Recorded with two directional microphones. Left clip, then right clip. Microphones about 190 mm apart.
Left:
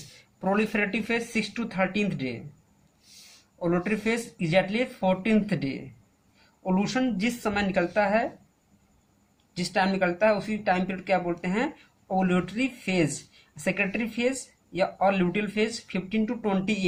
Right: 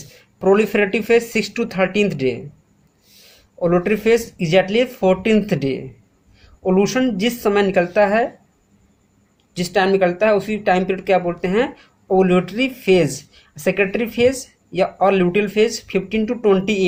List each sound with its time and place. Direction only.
0.3 s speech: 40° right (ahead or behind)
3.6 s speech: 45° right (ahead or behind)
9.6 s speech: 45° right (ahead or behind)